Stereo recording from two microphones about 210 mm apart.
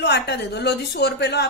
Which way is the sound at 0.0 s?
55° left (ahead or behind).